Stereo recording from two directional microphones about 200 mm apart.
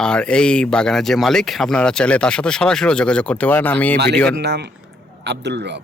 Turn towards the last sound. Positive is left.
turn(degrees=-60)  # may be behind; listen again after turning